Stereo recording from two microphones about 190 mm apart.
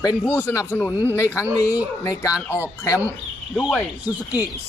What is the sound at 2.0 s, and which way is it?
A man's voice, 20° left (ahead or behind).